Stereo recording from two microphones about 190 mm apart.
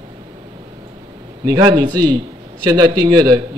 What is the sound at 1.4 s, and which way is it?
Speech, 20° right (ahead or behind).